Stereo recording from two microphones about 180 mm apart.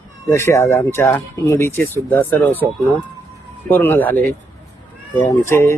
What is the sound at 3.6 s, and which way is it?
Speech, 10° left (ahead or behind).